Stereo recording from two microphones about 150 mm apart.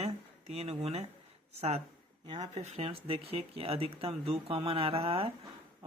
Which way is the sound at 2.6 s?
45° right (ahead or behind).